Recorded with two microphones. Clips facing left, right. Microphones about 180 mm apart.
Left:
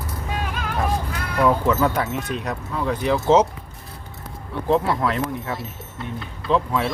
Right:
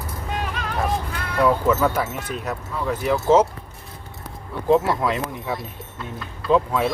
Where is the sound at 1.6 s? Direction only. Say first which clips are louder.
Even; 5° right (ahead or behind).